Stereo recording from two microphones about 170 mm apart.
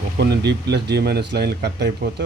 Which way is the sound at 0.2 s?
80° right.